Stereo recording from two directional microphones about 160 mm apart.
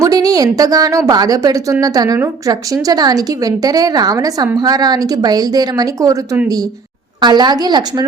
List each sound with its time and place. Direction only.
0.0 s a woman's voice: 20° right (ahead or behind)